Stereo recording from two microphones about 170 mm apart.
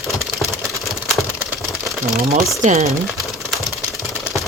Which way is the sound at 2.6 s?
40° right (ahead or behind).